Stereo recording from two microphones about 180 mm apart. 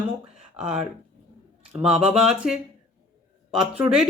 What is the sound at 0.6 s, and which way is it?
Speech, 35° right (ahead or behind).